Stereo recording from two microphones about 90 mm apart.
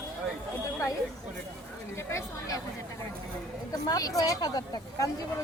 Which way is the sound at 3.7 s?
45° left (ahead or behind).